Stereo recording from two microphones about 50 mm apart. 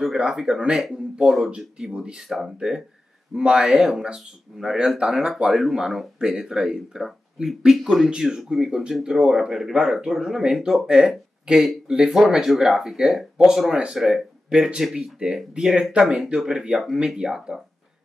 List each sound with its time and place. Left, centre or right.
0.2 s speech: centre